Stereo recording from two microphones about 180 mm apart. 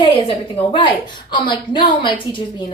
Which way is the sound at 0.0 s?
30° left (ahead or behind).